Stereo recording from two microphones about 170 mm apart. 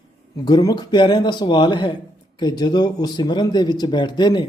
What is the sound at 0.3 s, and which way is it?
Speech, 20° left (ahead or behind).